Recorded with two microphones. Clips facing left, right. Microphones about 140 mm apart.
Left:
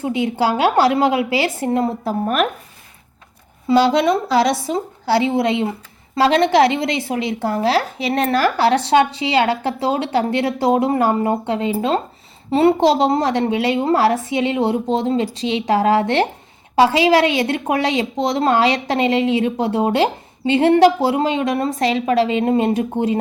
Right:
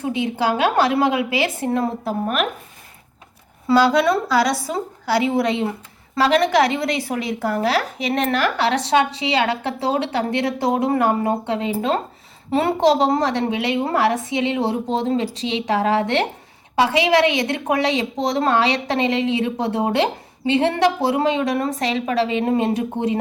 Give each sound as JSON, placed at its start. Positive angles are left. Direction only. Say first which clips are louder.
{"t": 0.3, "sound": "a woman's voice", "louder": "left 2 dB", "side_deg": 30}
{"t": 2.0, "sound": "speech", "louder": "left 3 dB", "side_deg": 40}
{"t": 3.7, "sound": "a woman's voice", "louder": "left 1 dB", "side_deg": 25}